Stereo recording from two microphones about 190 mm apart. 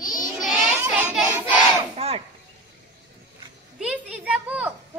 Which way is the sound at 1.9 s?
30° right (ahead or behind).